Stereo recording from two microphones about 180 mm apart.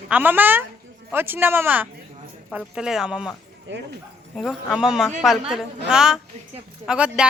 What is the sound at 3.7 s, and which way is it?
Speech, 90° right.